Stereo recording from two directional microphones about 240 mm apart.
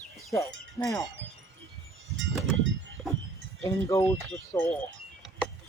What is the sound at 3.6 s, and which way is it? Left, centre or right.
Speech, centre.